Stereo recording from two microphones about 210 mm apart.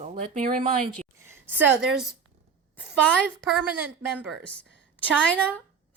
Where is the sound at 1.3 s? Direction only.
10° right (ahead or behind).